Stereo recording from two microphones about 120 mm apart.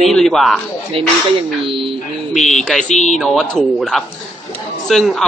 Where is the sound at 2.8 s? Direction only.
85° left.